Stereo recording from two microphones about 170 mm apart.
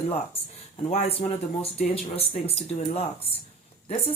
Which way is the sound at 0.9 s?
40° left (ahead or behind).